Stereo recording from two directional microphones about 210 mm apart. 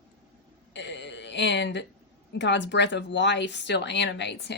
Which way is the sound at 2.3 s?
60° left (ahead or behind).